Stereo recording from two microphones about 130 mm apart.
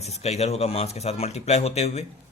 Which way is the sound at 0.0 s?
55° left (ahead or behind).